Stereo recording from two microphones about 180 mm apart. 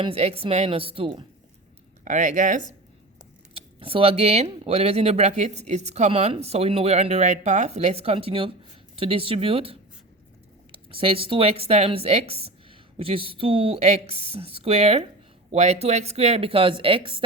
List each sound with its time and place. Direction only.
0.0 s speech: 35° right (ahead or behind)
2.0 s speech: 45° right (ahead or behind)
3.5 s speech: 30° right (ahead or behind)